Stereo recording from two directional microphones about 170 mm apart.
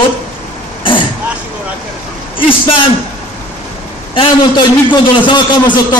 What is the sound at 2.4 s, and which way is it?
Speech, 30° left (ahead or behind).